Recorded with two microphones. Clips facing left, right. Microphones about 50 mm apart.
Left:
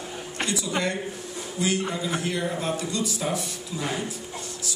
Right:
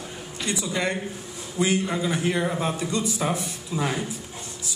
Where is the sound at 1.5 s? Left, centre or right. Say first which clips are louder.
Right 3 dB; right.